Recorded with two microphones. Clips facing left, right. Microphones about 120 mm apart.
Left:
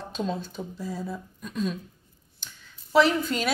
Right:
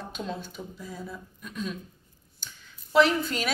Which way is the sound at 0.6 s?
30° left (ahead or behind).